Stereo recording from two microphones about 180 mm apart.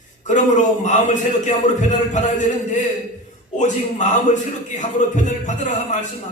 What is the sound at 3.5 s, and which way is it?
A man's voice, 40° left (ahead or behind).